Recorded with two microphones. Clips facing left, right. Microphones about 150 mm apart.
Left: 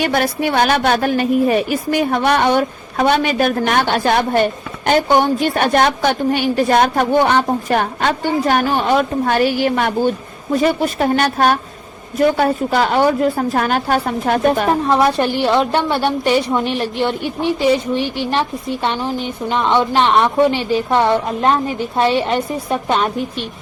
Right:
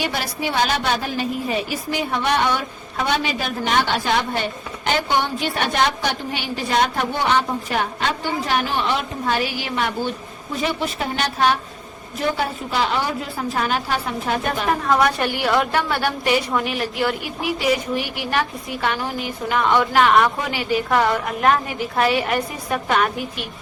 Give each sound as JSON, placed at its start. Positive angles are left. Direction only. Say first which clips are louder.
{"t": 0.0, "sound": "a woman's voice", "louder": "left 8 dB", "side_deg": 55}
{"t": 14.8, "sound": "a woman's voice", "louder": "left 4 dB", "side_deg": 30}